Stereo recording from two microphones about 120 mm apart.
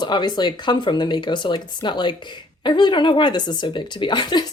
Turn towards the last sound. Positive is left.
turn(degrees=35)  # may be behind; listen again after turning